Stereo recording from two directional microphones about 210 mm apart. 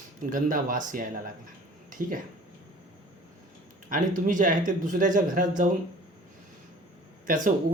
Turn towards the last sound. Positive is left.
turn(degrees=-40)  # may be behind; listen again after turning